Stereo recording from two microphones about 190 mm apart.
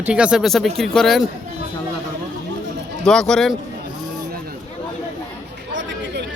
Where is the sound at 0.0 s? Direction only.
5° right (ahead or behind).